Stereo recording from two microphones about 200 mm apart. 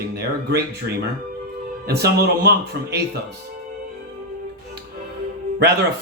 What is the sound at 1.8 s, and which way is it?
Speech, 55° right (ahead or behind).